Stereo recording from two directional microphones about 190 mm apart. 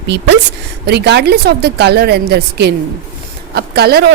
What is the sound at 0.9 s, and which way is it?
Speech, 60° right (ahead or behind).